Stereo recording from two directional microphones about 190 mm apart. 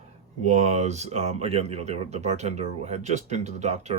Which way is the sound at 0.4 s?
35° right (ahead or behind).